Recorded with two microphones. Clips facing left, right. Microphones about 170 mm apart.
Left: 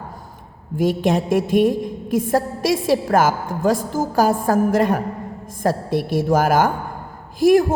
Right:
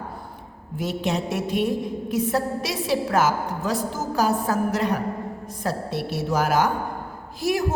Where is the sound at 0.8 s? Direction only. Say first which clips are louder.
Left 7 dB; 50° left (ahead or behind).